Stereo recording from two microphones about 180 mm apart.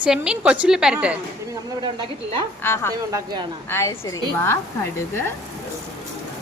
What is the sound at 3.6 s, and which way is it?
Speech, 15° left (ahead or behind).